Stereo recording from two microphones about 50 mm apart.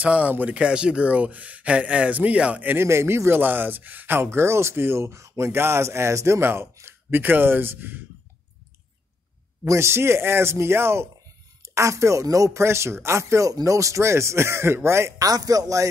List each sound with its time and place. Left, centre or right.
0.0 s speech: right
0.6 s speech: right
2.7 s speech: right
3.4 s speech: right
6.4 s speech: right
9.7 s speech: right
11.6 s speech: right